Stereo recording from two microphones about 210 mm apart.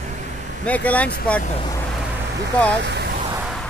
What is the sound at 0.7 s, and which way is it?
Speech, 5° left (ahead or behind).